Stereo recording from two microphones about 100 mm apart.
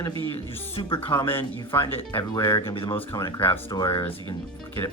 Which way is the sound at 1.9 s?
20° left (ahead or behind).